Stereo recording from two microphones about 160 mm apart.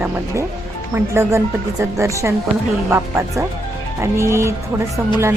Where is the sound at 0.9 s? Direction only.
15° right (ahead or behind).